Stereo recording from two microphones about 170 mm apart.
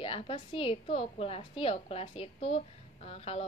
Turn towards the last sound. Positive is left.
turn(degrees=35)  # may be behind; listen again after turning